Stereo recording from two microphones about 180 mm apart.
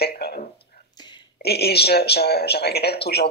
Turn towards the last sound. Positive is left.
turn(degrees=65)  # may be behind; listen again after turning